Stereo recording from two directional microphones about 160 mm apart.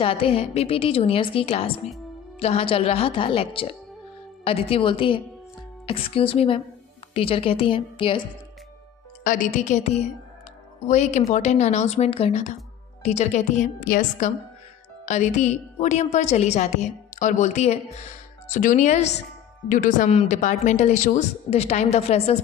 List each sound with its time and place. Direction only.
0.0 s a woman's voice: 35° left (ahead or behind)
9.2 s a woman's voice: 55° left (ahead or behind)
13.8 s a woman's voice: 60° left (ahead or behind)
15.0 s a woman's voice: 45° left (ahead or behind)
20.1 s a woman's voice: 45° left (ahead or behind)